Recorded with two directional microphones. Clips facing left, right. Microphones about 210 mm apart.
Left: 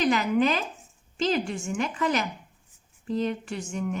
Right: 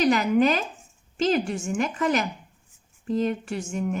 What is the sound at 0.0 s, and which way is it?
A woman's voice, 45° right (ahead or behind).